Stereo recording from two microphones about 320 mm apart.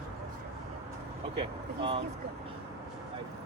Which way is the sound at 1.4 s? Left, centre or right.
Centre.